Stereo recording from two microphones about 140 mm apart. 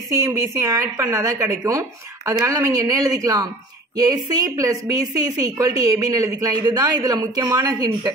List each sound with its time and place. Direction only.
0.1 s a woman's voice: 20° right (ahead or behind)